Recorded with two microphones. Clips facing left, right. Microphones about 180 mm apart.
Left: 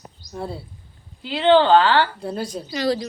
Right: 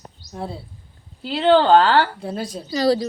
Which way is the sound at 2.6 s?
35° right (ahead or behind).